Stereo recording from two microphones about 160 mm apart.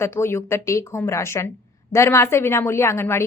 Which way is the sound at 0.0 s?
15° left (ahead or behind).